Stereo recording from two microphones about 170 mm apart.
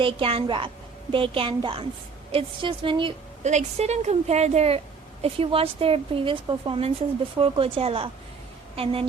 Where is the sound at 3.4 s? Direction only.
40° right (ahead or behind).